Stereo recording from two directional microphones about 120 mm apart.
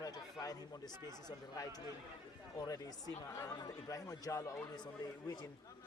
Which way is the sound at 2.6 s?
30° left (ahead or behind).